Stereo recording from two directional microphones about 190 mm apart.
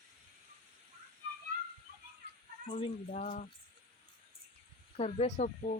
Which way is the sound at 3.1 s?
40° left (ahead or behind).